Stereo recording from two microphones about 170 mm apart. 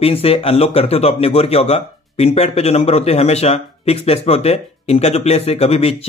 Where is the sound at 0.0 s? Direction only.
35° left (ahead or behind).